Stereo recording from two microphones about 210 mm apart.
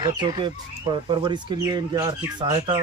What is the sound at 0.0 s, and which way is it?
Speech, 20° right (ahead or behind).